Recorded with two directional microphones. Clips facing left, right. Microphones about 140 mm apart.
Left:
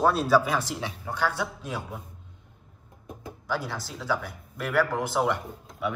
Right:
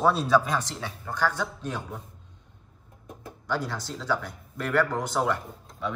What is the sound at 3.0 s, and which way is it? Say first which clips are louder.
A man's voice: even; centre (ahead or behind).